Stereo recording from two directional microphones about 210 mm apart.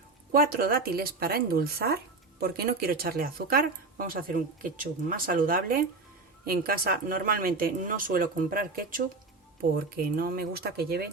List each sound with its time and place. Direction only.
0.3 s speech: 45° right (ahead or behind)